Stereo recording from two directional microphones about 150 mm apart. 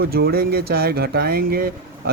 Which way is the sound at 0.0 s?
90° right.